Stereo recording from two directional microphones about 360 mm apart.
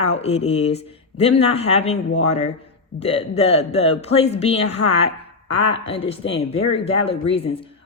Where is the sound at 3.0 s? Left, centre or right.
Centre.